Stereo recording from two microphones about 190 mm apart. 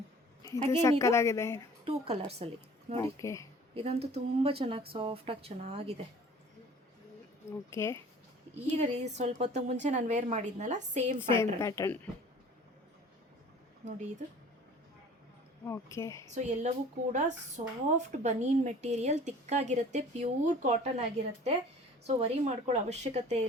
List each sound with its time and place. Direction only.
0.4 s a woman's voice: 15° left (ahead or behind)
1.8 s speech: 30° right (ahead or behind)
3.0 s a woman's voice: 15° left (ahead or behind)
3.8 s speech: 35° right (ahead or behind)
7.7 s a woman's voice: 15° left (ahead or behind)
8.6 s speech: 35° right (ahead or behind)
11.2 s a woman's voice: 15° left (ahead or behind)
15.6 s a woman's voice: 15° left (ahead or behind)
16.3 s speech: 40° right (ahead or behind)